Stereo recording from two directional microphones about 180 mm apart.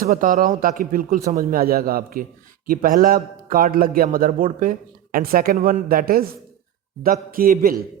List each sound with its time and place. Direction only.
0.0 s a man's voice: 50° right (ahead or behind)